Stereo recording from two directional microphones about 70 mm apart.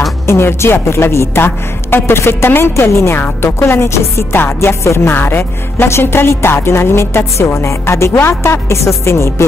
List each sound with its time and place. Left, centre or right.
0.3 s a woman's voice: left